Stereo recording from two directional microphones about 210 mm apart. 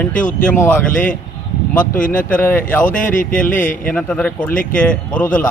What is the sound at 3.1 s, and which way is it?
Speech, 40° left (ahead or behind).